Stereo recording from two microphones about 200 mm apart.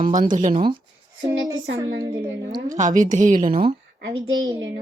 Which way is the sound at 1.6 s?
60° right (ahead or behind).